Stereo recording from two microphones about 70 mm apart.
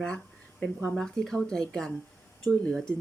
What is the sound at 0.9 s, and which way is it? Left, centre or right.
Speech, centre.